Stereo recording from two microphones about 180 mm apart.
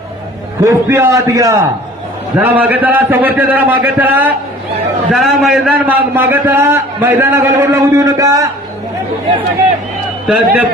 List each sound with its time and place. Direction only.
0.6 s a man's voice: 15° right (ahead or behind)
10.2 s a man's voice: 5° right (ahead or behind)